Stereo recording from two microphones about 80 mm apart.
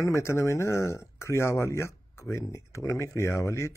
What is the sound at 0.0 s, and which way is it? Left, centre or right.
Speech, left.